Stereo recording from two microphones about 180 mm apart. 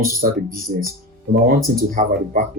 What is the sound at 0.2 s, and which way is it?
Speech, 50° right (ahead or behind).